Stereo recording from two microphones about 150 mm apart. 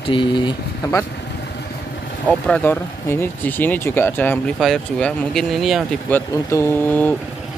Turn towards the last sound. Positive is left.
turn(degrees=15)  # may be behind; listen again after turning